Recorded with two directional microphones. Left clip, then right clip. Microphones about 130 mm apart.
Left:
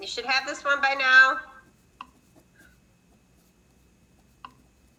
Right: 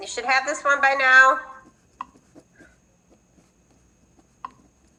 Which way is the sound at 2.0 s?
45° right (ahead or behind).